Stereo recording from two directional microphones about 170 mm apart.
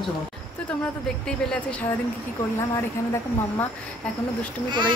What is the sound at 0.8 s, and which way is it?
Speech, 5° left (ahead or behind).